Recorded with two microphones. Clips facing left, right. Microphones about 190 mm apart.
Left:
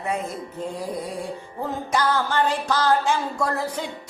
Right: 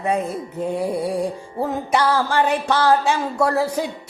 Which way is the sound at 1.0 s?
35° right (ahead or behind).